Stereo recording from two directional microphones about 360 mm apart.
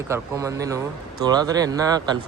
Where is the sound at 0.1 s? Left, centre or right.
Centre.